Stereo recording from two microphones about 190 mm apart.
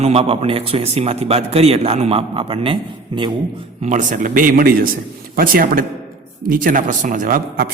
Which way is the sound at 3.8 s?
40° right (ahead or behind).